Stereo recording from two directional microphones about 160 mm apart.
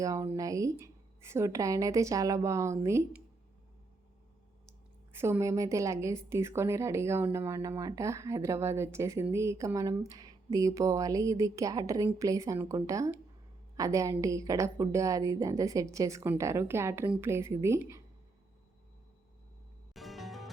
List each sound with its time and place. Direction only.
0.0 s a woman's voice: 20° right (ahead or behind)
5.1 s a woman's voice: 15° right (ahead or behind)
19.9 s music: centre (ahead or behind)